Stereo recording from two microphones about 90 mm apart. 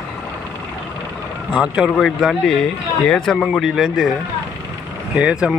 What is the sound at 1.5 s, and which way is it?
Speech, 10° right (ahead or behind).